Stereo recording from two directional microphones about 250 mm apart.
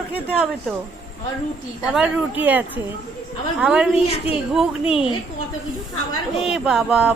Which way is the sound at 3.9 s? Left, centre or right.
Left.